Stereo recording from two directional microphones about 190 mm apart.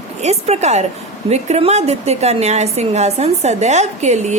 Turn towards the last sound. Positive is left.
turn(degrees=-35)  # may be behind; listen again after turning